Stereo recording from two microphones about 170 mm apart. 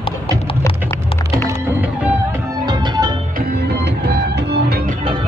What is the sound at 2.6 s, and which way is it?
Music, 25° right (ahead or behind).